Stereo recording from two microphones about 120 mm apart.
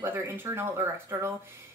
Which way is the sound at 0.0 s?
15° right (ahead or behind).